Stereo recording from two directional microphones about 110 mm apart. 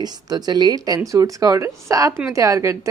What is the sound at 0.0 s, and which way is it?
Speech, 40° right (ahead or behind).